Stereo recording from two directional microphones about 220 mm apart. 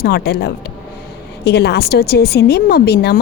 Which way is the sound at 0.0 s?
45° left (ahead or behind).